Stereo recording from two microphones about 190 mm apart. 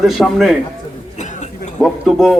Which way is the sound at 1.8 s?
Centre (ahead or behind).